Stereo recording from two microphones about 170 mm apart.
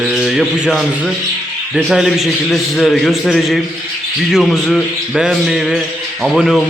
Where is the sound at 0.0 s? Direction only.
Centre (ahead or behind).